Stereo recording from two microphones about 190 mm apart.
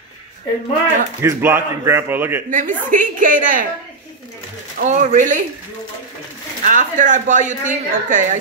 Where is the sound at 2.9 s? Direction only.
45° right (ahead or behind).